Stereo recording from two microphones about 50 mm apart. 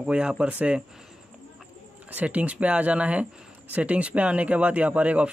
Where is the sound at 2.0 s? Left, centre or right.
Right.